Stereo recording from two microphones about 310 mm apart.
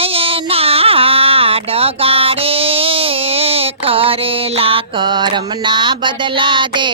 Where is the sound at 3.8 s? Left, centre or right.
Centre.